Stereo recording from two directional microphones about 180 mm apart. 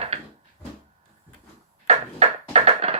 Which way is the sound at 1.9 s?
35° right (ahead or behind).